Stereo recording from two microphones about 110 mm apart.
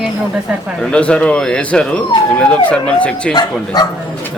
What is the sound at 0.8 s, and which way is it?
Speech, 10° left (ahead or behind).